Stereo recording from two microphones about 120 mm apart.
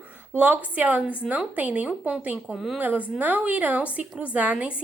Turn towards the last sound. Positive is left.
turn(degrees=-10)  # may be behind; listen again after turning